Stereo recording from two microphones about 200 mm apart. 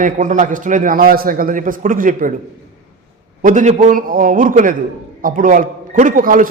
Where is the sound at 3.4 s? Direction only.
40° right (ahead or behind).